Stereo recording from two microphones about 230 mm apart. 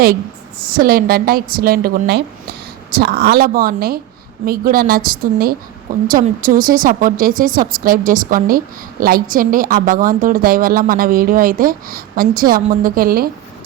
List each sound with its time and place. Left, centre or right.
0.6 s speech: right